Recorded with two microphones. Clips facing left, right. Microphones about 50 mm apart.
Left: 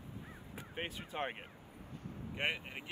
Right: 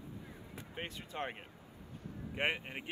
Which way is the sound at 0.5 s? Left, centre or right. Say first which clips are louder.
Left 2 dB; centre.